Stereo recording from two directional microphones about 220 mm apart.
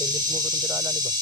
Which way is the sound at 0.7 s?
5° right (ahead or behind).